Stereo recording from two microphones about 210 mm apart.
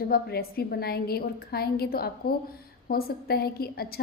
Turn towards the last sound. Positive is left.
turn(degrees=45)  # may be behind; listen again after turning